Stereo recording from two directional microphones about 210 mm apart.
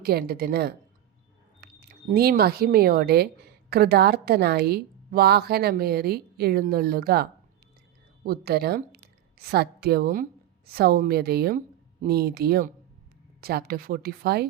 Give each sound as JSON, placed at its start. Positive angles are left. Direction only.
{"t": 0.0, "sound": "a woman's voice", "side_deg": -45}